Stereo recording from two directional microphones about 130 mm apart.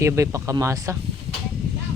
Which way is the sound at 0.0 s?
25° right (ahead or behind).